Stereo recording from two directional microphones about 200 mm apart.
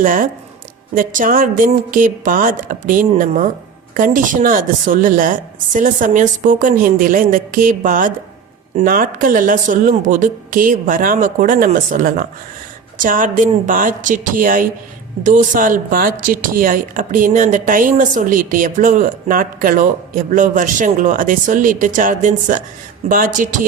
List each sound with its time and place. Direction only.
0.0 s a woman's voice: 45° right (ahead or behind)